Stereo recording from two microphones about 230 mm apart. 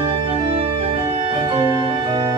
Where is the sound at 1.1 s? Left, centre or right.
Right.